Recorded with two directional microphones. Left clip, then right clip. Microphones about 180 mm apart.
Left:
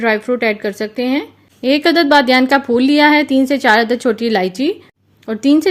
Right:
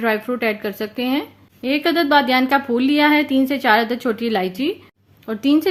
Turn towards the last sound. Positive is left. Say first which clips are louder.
# left 4 dB
turn(degrees=25)  # may be behind; listen again after turning